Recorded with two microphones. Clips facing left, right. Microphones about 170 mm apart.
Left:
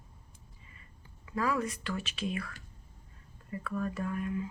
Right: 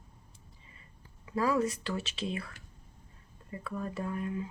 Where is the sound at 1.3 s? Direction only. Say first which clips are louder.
Right 3 dB; 25° right (ahead or behind).